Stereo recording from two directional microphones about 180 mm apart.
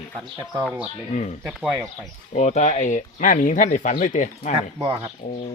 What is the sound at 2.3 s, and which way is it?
Speech, 40° left (ahead or behind).